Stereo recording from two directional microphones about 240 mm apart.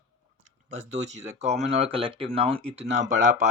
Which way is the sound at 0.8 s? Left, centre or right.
Right.